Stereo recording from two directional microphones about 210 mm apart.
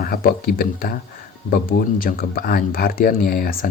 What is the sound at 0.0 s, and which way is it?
Speech, 45° left (ahead or behind).